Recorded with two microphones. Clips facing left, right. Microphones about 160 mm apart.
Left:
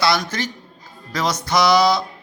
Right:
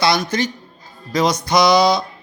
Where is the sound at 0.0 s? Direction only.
20° right (ahead or behind).